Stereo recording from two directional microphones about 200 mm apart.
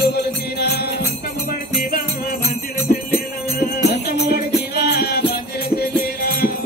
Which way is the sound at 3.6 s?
50° left (ahead or behind).